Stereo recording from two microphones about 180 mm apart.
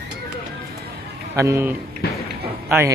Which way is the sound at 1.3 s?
15° right (ahead or behind).